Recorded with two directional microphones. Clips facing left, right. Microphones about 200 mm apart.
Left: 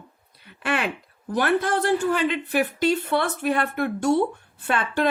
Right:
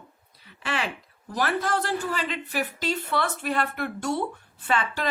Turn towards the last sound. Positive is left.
turn(degrees=55)  # may be behind; listen again after turning